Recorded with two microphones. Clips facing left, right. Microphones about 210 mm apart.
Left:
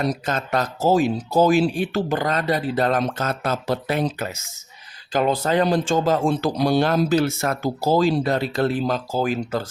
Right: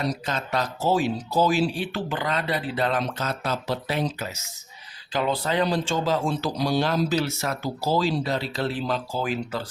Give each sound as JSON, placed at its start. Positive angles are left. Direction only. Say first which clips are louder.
{"t": 0.0, "sound": "speech", "louder": "left 4 dB", "side_deg": 50}